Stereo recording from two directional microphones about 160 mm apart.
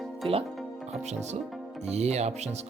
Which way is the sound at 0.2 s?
35° right (ahead or behind).